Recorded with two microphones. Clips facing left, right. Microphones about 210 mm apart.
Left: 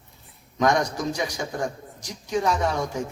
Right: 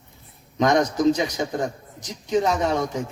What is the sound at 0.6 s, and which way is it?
A man's voice, 20° right (ahead or behind).